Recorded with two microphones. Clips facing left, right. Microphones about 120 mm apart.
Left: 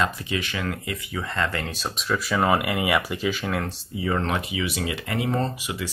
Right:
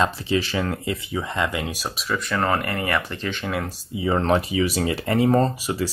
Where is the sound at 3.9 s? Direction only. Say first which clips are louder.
Right 5 dB; 25° right (ahead or behind).